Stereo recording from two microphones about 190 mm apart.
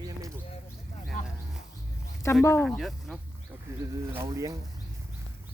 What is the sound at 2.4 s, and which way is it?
Speech, 15° left (ahead or behind).